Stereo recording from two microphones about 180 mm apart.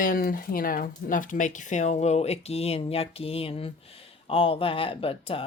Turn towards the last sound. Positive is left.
turn(degrees=30)  # may be behind; listen again after turning